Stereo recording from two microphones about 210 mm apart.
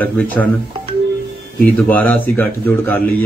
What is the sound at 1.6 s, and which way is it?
A man's voice, 10° left (ahead or behind).